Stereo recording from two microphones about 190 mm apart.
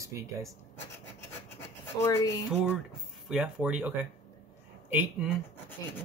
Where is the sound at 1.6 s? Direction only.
15° left (ahead or behind).